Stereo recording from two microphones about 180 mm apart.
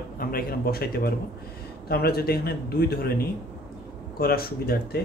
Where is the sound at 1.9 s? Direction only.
60° left (ahead or behind).